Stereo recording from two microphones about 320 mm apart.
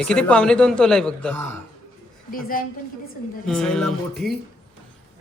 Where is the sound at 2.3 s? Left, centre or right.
Left.